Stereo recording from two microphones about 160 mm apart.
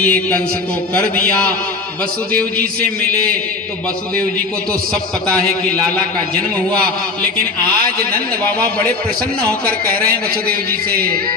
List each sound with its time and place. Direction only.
0.0 s a man's voice: 10° left (ahead or behind)
10.1 s a man's voice: 70° right (ahead or behind)